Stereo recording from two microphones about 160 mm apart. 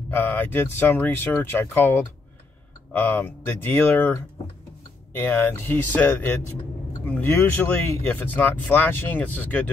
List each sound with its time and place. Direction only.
0.1 s speech: 10° left (ahead or behind)